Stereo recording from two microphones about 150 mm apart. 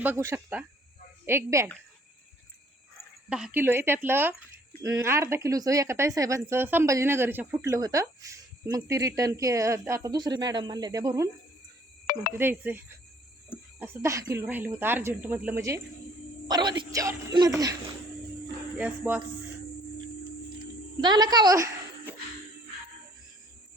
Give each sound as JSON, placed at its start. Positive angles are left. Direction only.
{"t": 0.0, "sound": "speech", "side_deg": -15}
{"t": 3.2, "sound": "speech", "side_deg": -5}
{"t": 12.4, "sound": "speech", "side_deg": -15}
{"t": 18.8, "sound": "speech", "side_deg": -10}
{"t": 21.0, "sound": "a woman's voice", "side_deg": -30}